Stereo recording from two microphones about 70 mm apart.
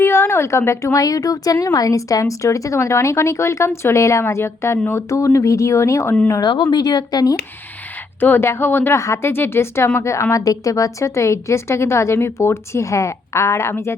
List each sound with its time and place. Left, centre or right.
0.0 s a woman's voice: left
6.4 s a woman's voice: left
8.2 s a woman's voice: left
9.3 s a woman's voice: left
10.3 s a woman's voice: left